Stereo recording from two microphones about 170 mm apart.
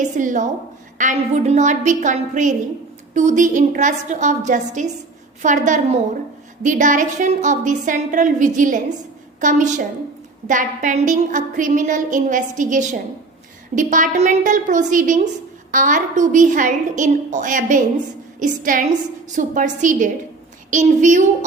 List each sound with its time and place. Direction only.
0.2 s a woman's voice: 45° right (ahead or behind)